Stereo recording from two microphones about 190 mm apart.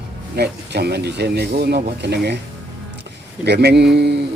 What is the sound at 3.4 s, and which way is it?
Speech, 60° right (ahead or behind).